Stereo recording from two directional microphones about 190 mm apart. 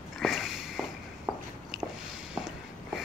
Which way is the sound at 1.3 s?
20° right (ahead or behind).